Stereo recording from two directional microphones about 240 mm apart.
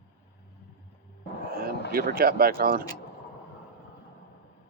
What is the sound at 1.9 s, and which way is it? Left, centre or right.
Speech, right.